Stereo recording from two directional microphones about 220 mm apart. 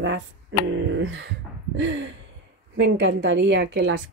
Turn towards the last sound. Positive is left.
turn(degrees=-50)  # may be behind; listen again after turning